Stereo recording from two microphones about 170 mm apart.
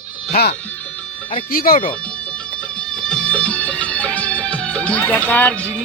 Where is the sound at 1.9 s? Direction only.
5° left (ahead or behind).